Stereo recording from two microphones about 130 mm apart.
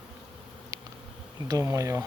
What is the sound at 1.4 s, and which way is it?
Speech, 25° right (ahead or behind).